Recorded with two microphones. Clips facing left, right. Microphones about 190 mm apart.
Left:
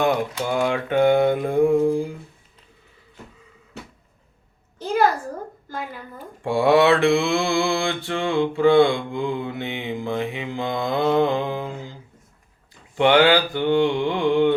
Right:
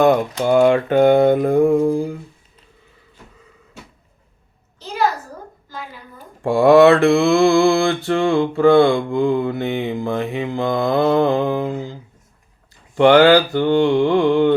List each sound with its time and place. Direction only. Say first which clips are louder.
0.0 s mantra: right 7 dB; 50° right (ahead or behind)
6.4 s mantra: right 6 dB; 45° right (ahead or behind)
13.0 s mantra: right 5 dB; 40° right (ahead or behind)